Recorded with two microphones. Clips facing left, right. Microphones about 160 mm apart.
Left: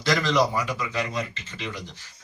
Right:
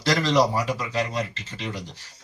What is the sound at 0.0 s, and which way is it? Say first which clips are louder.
A man's voice: right 2 dB; 35° right (ahead or behind).